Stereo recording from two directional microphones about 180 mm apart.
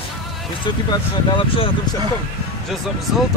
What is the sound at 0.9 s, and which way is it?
Speech, 25° left (ahead or behind).